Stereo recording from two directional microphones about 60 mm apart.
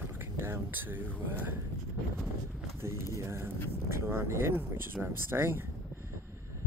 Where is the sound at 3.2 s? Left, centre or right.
Right.